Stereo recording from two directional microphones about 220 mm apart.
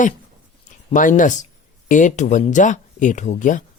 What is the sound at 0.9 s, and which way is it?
Speech, 35° left (ahead or behind).